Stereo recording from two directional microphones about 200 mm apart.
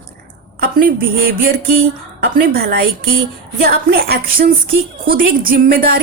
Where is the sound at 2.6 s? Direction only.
55° right (ahead or behind).